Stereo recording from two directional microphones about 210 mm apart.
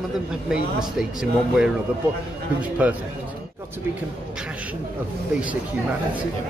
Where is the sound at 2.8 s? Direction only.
5° right (ahead or behind).